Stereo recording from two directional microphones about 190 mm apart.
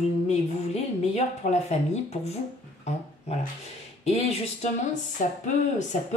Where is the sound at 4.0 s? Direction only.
35° left (ahead or behind).